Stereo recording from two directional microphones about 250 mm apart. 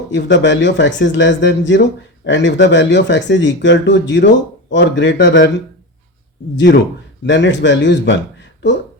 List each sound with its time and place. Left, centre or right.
0.1 s speech: left
6.7 s speech: left